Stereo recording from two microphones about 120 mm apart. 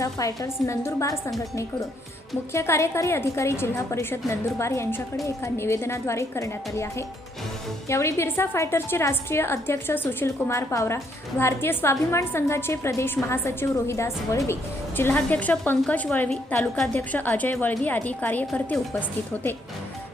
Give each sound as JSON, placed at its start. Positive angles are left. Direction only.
{"t": 0.0, "sound": "a woman's voice", "side_deg": 25}
{"t": 2.5, "sound": "a woman's voice", "side_deg": 25}